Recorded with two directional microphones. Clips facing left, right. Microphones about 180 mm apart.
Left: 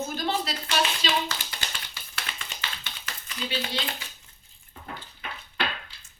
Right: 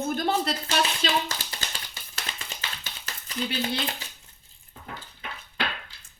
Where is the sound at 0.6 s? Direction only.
35° right (ahead or behind).